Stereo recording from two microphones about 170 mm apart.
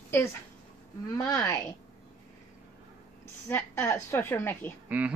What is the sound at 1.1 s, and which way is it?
Speech, 20° left (ahead or behind).